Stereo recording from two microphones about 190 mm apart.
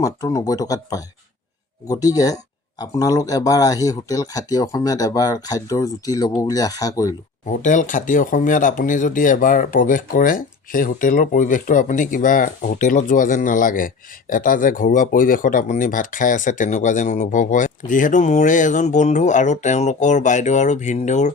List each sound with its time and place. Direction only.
0.0 s speech: 15° left (ahead or behind)
7.4 s speech: 40° left (ahead or behind)